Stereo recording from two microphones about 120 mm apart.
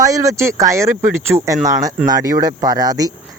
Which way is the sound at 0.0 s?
25° right (ahead or behind).